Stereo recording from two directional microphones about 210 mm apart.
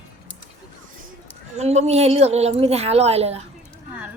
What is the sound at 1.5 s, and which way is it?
Speech, 30° right (ahead or behind).